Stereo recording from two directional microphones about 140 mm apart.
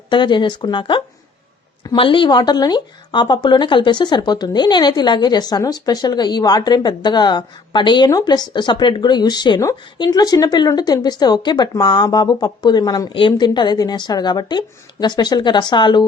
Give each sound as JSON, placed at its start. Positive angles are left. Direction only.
{"t": 0.1, "sound": "speech", "side_deg": 35}